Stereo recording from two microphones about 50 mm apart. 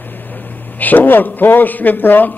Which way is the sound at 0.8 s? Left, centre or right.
Left.